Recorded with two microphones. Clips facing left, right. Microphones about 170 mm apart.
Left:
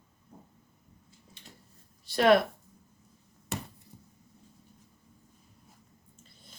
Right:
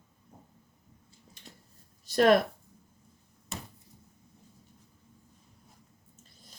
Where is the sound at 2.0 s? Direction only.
40° right (ahead or behind).